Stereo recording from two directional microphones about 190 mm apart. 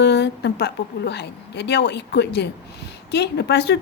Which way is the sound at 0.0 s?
60° left (ahead or behind).